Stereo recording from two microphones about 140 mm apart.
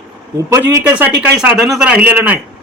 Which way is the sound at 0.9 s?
10° right (ahead or behind).